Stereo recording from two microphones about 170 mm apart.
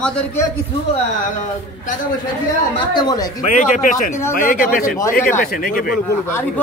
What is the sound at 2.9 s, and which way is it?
Speech, 25° left (ahead or behind).